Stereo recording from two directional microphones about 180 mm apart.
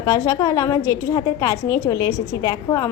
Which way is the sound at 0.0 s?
20° left (ahead or behind).